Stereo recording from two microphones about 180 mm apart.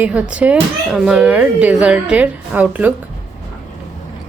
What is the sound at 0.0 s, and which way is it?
Speech, 5° right (ahead or behind).